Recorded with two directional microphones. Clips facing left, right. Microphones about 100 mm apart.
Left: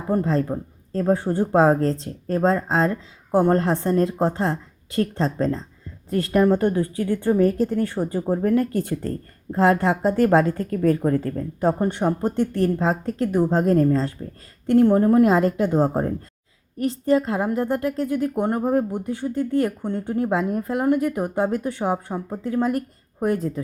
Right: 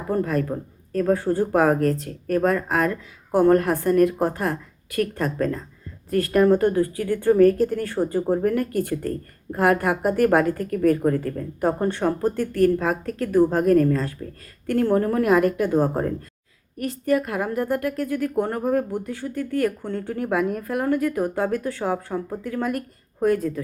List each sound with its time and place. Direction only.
0.1 s a woman's voice: 25° left (ahead or behind)
11.8 s a woman's voice: 20° left (ahead or behind)